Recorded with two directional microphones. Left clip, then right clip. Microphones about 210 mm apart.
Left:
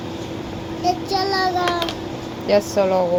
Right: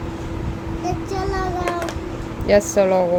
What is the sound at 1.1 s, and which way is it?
Child singing, 15° right (ahead or behind).